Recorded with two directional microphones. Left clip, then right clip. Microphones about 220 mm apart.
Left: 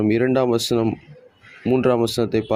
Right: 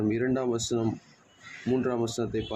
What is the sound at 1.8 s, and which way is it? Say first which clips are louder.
Speech: left 11 dB; 30° left (ahead or behind).